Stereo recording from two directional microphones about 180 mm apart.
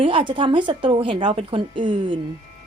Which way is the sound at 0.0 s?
30° right (ahead or behind).